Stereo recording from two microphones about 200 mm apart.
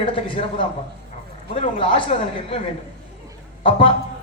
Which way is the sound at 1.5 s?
35° left (ahead or behind).